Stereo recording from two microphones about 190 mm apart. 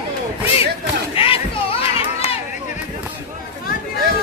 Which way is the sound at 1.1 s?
30° left (ahead or behind).